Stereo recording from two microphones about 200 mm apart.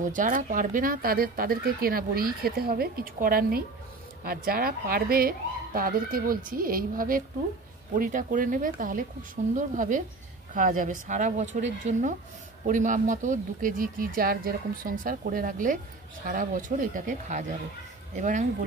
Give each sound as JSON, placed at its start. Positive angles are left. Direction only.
{"t": 0.0, "sound": "speech", "side_deg": -40}